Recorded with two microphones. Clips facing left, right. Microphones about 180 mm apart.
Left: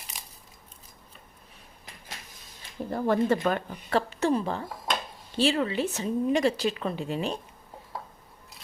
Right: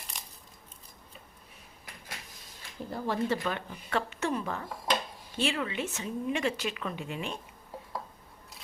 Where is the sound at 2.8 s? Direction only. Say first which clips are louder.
Left 6 dB; 55° left (ahead or behind); by 7.4 s 35° left (ahead or behind).